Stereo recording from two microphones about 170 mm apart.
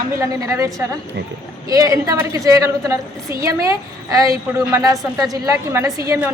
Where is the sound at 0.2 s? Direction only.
15° right (ahead or behind).